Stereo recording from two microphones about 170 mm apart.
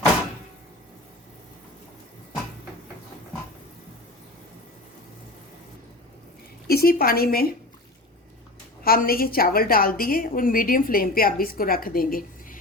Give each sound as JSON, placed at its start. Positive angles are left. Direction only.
{"t": 6.7, "sound": "a woman's voice", "side_deg": 65}
{"t": 8.8, "sound": "a woman's voice", "side_deg": 60}